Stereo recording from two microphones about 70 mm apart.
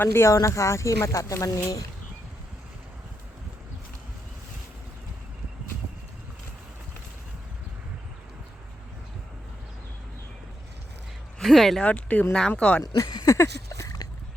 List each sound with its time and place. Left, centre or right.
0.0 s speech: left
11.3 s speech: centre
11.8 s speech: centre
12.8 s speech: left
13.2 s a sound: left